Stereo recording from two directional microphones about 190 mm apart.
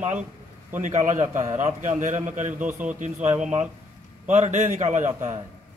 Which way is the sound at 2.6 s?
10° right (ahead or behind).